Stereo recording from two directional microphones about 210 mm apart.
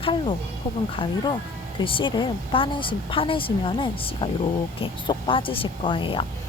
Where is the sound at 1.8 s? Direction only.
25° left (ahead or behind).